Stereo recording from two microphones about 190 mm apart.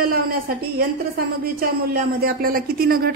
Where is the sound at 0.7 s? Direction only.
50° right (ahead or behind).